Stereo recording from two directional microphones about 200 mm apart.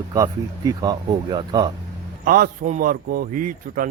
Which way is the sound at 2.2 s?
45° right (ahead or behind).